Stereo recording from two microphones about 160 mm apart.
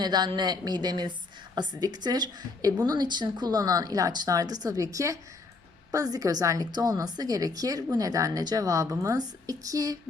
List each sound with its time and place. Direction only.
0.0 s a woman's voice: 25° right (ahead or behind)